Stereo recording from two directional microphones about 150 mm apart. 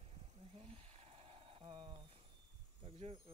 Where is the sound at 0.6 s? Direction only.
40° right (ahead or behind).